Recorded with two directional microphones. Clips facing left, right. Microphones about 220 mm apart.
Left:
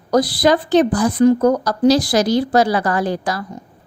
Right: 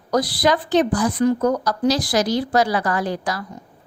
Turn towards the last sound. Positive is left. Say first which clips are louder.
# left 4 dB
turn(degrees=30)  # may be behind; listen again after turning